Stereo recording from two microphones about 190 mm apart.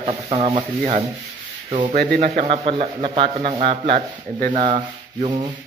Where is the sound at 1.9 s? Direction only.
50° right (ahead or behind).